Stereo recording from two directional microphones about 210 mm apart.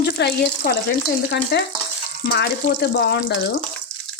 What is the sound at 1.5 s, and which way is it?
Speech, 50° left (ahead or behind).